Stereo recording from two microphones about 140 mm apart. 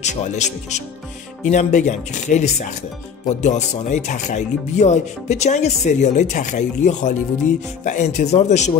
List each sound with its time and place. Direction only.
0.0 s speech: 55° left (ahead or behind)